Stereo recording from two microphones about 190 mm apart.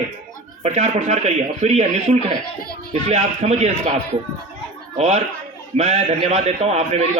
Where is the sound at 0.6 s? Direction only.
35° right (ahead or behind).